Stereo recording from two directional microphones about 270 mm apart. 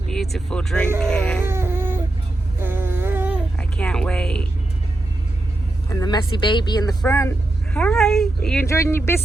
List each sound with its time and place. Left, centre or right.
0.3 s speech: centre
1.5 s baby cry: centre
2.6 s humming: centre
3.6 s speech: centre
5.9 s speech: centre